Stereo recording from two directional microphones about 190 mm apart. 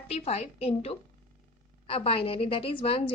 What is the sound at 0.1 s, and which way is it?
A woman's voice, 35° left (ahead or behind).